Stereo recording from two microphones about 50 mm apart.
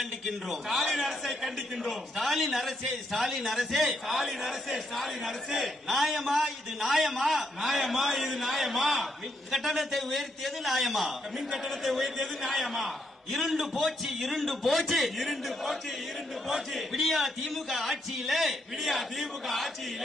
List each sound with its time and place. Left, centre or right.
0.0 s a man's voice: centre